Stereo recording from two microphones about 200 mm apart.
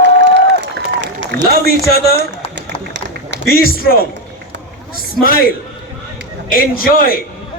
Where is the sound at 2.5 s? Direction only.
60° right (ahead or behind).